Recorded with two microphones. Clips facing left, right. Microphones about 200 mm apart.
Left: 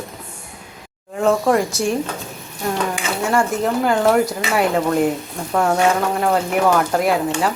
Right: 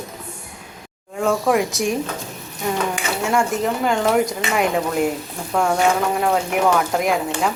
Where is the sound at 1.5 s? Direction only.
Centre (ahead or behind).